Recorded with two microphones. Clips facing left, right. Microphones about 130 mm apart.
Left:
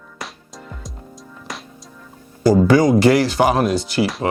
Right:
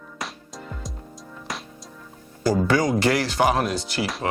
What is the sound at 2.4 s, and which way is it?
Speech, 10° left (ahead or behind).